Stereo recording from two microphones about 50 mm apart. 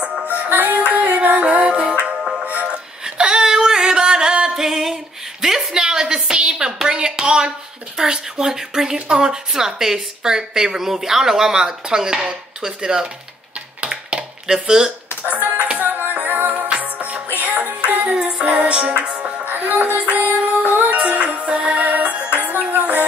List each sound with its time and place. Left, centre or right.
0.0 s music: right
0.5 s music: right
0.7 s music: right
3.2 s a sound: centre
8.0 s speech: centre
13.7 s a sound: centre
15.7 s music: right
16.5 s music: right
19.4 s music: right